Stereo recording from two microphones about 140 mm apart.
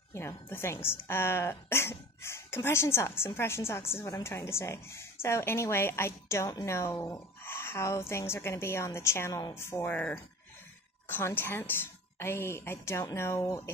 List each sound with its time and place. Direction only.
0.1 s a woman's voice: 20° left (ahead or behind)